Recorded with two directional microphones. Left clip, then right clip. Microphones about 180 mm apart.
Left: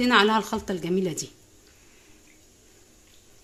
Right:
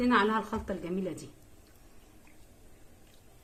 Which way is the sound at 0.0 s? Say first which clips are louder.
Left 7 dB; 50° left (ahead or behind).